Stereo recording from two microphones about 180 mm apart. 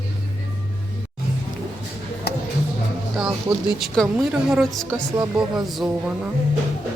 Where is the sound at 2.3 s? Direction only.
60° left (ahead or behind).